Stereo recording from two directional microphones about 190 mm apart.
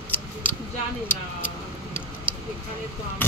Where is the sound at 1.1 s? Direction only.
10° left (ahead or behind).